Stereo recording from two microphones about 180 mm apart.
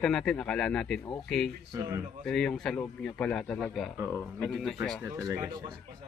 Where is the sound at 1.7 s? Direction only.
15° right (ahead or behind).